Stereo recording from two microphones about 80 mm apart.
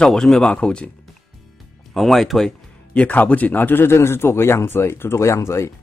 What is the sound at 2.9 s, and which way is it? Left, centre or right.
Speech, centre.